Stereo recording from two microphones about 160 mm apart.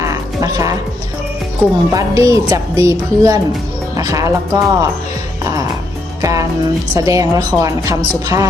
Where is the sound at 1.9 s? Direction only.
20° right (ahead or behind).